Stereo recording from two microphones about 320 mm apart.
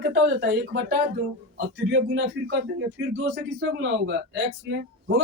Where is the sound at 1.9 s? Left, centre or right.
Right.